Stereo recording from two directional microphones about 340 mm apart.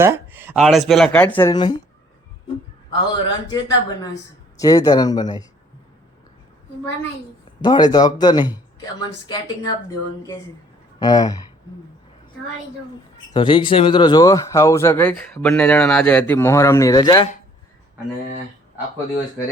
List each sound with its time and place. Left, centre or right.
0.0 s speech: centre
2.9 s speech: centre
7.6 s speech: centre
11.0 s speech: centre
13.3 s speech: centre